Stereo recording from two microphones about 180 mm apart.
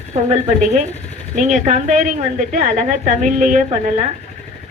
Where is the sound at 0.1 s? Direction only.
40° right (ahead or behind).